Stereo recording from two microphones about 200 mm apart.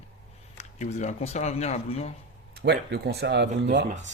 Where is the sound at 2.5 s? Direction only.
55° right (ahead or behind).